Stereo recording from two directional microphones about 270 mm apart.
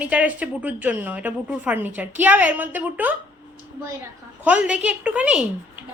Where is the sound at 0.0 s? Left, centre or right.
Centre.